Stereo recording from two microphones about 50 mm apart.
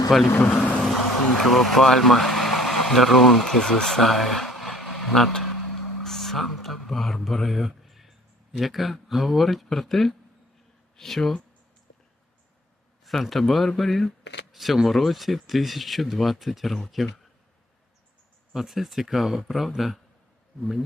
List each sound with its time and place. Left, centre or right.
0.1 s speech: centre
0.4 s vehicle: left
0.8 s vehicle: centre
8.5 s speech: centre
13.1 s speech: centre
18.5 s speech: centre